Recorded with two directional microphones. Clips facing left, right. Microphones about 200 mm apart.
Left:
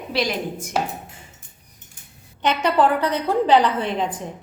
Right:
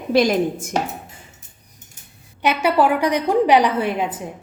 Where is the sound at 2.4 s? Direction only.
10° right (ahead or behind).